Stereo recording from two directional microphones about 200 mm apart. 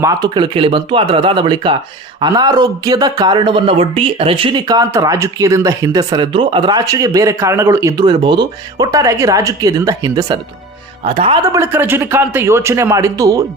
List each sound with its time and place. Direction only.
0.0 s speech: 20° right (ahead or behind)
11.0 s speech: 30° right (ahead or behind)
11.5 s speech: 10° right (ahead or behind)